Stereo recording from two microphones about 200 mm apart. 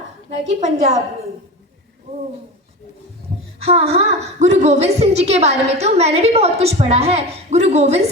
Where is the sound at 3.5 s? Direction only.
30° right (ahead or behind).